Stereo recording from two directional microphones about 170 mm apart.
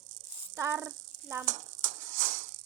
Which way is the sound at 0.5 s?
15° right (ahead or behind).